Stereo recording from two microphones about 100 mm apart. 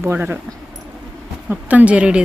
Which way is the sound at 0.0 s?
20° right (ahead or behind).